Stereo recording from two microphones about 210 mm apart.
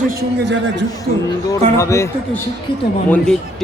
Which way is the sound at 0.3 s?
55° right (ahead or behind).